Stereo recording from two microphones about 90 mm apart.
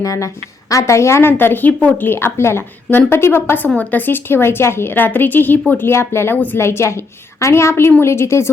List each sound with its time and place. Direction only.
0.0 s a woman's voice: 40° left (ahead or behind)